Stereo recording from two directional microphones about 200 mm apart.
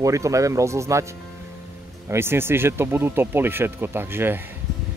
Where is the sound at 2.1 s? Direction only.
10° right (ahead or behind).